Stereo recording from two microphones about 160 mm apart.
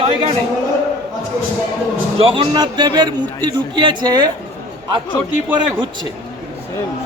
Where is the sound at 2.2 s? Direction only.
35° right (ahead or behind).